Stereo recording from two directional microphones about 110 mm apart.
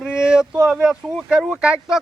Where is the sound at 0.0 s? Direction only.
5° right (ahead or behind).